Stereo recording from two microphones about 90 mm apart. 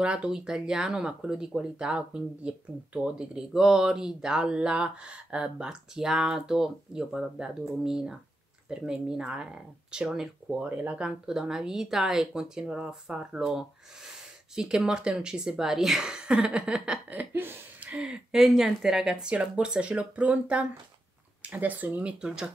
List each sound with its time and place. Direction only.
0.0 s speech: 10° right (ahead or behind)
10.6 s speech: 20° right (ahead or behind)
17.9 s speech: 10° right (ahead or behind)